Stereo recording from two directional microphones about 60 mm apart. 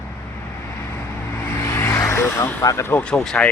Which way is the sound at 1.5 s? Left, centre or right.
Left.